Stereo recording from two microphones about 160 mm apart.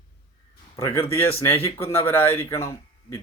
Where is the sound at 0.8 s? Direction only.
15° left (ahead or behind).